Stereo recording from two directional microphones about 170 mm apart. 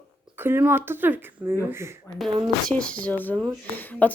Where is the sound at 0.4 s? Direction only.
15° right (ahead or behind).